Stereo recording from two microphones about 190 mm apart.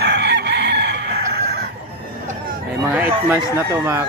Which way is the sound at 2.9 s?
10° right (ahead or behind).